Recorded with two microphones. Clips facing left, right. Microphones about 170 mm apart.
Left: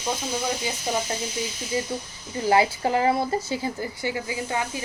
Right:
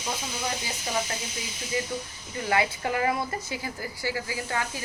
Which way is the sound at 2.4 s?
30° left (ahead or behind).